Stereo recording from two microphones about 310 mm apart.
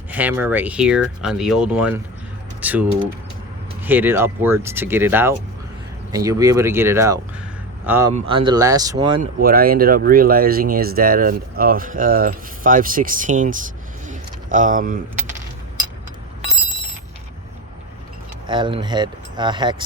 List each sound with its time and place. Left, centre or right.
0.1 s speech: centre
3.8 s speech: centre
9.4 s speech: right
18.4 s speech: centre